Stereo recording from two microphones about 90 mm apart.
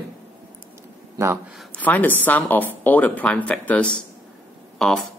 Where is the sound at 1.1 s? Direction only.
35° right (ahead or behind).